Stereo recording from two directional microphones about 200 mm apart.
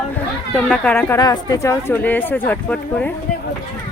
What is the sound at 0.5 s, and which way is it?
Speech, 5° left (ahead or behind).